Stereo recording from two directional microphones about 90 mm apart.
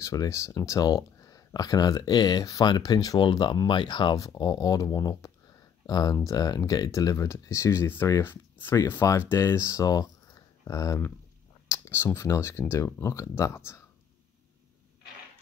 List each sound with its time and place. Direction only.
0.0 s speech: 40° left (ahead or behind)
2.6 s speech: 50° left (ahead or behind)
3.2 s speech: 55° left (ahead or behind)
4.4 s speech: 50° left (ahead or behind)
11.9 s speech: 25° left (ahead or behind)